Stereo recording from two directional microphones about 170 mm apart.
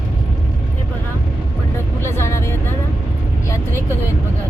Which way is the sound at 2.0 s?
15° left (ahead or behind).